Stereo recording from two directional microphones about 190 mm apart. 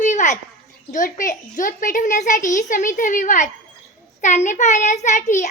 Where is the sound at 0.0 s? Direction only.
40° left (ahead or behind).